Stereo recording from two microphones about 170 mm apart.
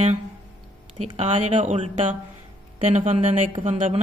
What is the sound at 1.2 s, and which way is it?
Speech, 40° right (ahead or behind).